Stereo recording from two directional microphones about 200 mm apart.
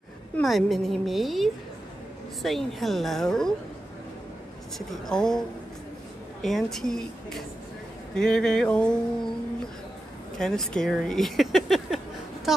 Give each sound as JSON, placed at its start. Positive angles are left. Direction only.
{"t": 0.4, "sound": "a woman's voice", "side_deg": 0}
{"t": 4.7, "sound": "a woman's voice", "side_deg": 0}
{"t": 6.4, "sound": "a woman's voice", "side_deg": 0}
{"t": 10.3, "sound": "speech", "side_deg": 0}